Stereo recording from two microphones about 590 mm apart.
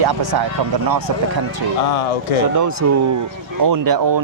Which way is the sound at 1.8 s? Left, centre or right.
Left.